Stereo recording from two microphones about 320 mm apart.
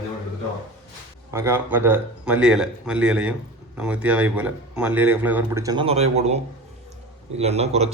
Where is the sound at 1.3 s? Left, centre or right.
Centre.